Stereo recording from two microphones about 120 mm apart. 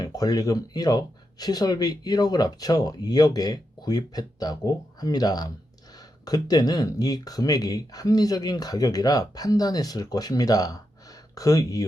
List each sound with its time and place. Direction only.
0.0 s speech: 30° left (ahead or behind)